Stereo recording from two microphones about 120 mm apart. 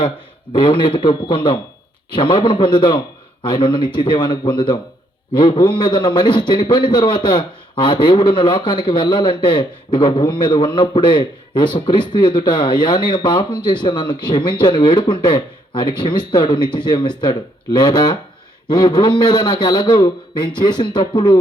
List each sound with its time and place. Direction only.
0.5 s a man's voice: 40° left (ahead or behind)